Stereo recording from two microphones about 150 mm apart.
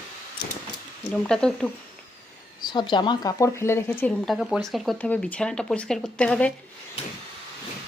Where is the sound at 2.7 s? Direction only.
30° left (ahead or behind); by 6.5 s 10° left (ahead or behind).